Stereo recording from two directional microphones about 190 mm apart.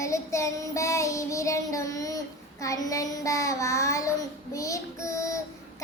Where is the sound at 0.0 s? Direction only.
15° left (ahead or behind).